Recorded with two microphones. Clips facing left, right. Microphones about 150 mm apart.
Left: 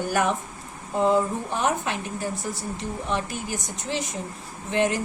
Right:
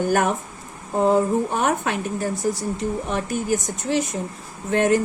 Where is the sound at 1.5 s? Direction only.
55° right (ahead or behind).